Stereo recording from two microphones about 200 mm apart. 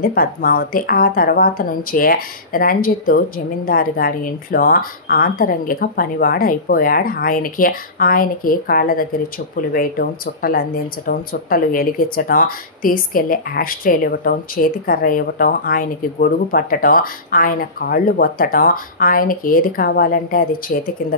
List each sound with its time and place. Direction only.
0.0 s speech: 45° left (ahead or behind)